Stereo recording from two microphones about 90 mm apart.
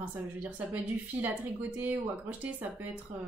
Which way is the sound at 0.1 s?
15° right (ahead or behind).